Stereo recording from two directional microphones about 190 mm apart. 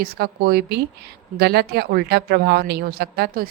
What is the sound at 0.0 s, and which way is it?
A woman's voice, 55° right (ahead or behind).